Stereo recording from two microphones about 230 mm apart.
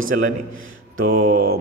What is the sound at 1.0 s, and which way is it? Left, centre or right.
Speech, right.